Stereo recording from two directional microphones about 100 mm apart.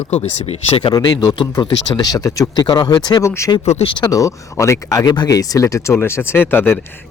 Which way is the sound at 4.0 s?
35° left (ahead or behind).